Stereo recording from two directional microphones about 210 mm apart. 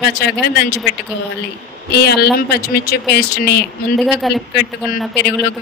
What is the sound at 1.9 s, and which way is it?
Speech, 50° left (ahead or behind).